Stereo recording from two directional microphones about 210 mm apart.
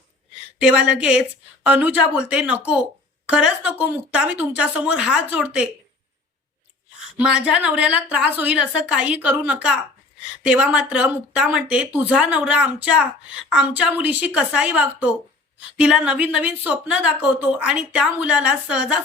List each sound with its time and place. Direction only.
0.6 s a woman's voice: 5° right (ahead or behind)
7.2 s a woman's voice: 5° right (ahead or behind)